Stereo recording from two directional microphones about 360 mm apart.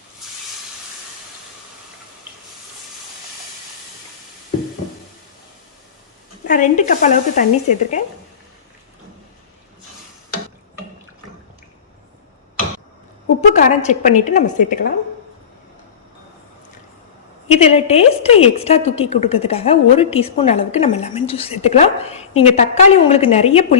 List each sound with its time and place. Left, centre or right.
6.5 s speech: left
13.5 s speech: centre
17.5 s a woman's voice: centre